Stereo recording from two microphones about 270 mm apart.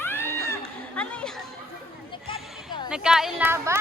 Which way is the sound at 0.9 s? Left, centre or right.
Centre.